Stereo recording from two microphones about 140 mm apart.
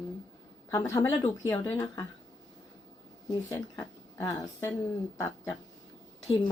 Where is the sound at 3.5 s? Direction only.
20° left (ahead or behind).